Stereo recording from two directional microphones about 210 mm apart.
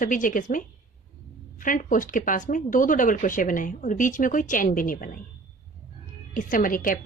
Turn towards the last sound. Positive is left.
turn(degrees=40)  # may be behind; listen again after turning